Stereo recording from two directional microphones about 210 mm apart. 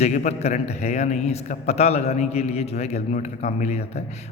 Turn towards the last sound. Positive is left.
turn(degrees=30)  # may be behind; listen again after turning